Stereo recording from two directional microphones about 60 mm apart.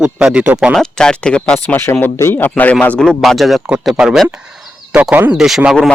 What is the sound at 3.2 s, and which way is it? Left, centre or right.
Speech, centre.